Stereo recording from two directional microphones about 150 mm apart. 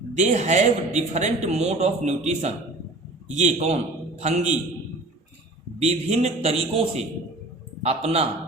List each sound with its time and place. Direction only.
0.1 s speech: 50° right (ahead or behind)
5.8 s speech: 45° right (ahead or behind)